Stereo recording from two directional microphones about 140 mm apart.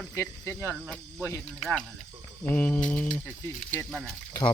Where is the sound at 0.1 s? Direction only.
20° left (ahead or behind).